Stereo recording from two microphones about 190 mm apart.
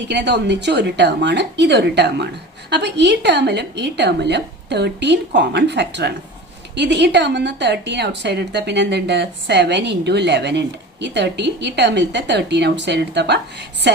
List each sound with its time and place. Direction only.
0.1 s a woman's voice: 65° right (ahead or behind)